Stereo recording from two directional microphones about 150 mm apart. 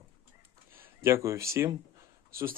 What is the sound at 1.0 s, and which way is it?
Speech, 20° right (ahead or behind).